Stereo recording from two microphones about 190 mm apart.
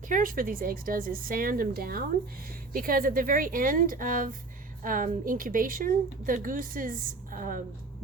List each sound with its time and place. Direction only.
0.1 s a woman's voice: 45° right (ahead or behind)